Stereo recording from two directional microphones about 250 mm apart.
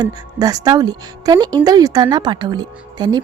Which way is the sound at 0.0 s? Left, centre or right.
Centre.